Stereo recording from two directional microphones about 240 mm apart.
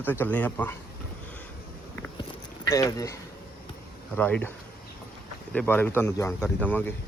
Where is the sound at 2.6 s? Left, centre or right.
Centre.